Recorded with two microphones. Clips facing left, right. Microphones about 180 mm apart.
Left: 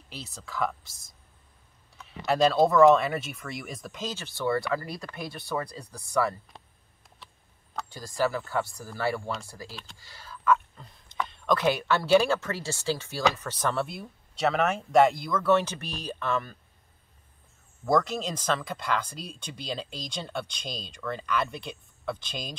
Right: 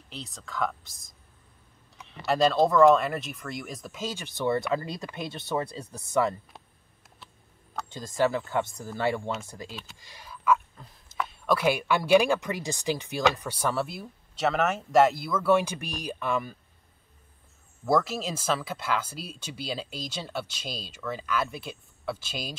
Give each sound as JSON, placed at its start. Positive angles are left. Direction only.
{"t": 0.1, "sound": "speech", "side_deg": 0}
{"t": 8.2, "sound": "speech", "side_deg": -20}
{"t": 17.8, "sound": "speech", "side_deg": -5}